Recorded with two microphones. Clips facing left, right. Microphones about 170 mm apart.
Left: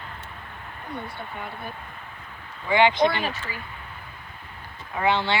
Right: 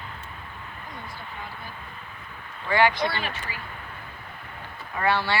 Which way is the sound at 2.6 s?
20° left (ahead or behind).